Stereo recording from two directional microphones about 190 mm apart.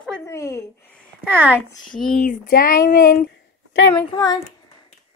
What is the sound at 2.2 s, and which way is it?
Speech, 50° left (ahead or behind).